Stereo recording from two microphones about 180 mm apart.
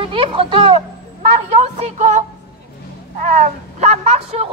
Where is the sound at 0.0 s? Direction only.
30° right (ahead or behind).